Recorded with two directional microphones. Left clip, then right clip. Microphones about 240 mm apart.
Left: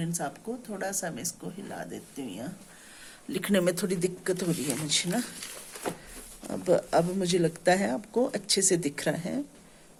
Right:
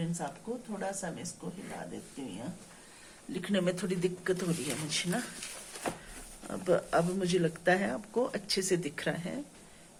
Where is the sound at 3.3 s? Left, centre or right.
Left.